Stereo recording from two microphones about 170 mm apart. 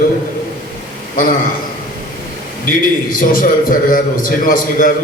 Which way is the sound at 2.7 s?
55° left (ahead or behind).